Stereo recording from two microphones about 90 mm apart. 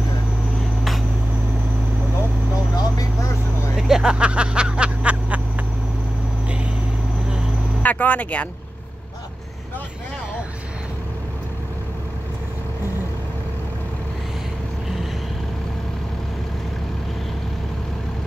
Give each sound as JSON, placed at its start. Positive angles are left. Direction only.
{"t": 2.8, "sound": "vehicle", "side_deg": 40}
{"t": 3.7, "sound": "vehicle", "side_deg": -5}
{"t": 7.8, "sound": "speech", "side_deg": 15}